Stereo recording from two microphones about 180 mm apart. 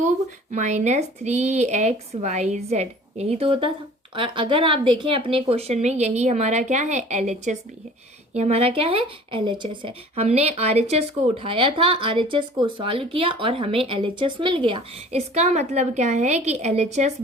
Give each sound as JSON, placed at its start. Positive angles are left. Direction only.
{"t": 0.5, "sound": "speech", "side_deg": -40}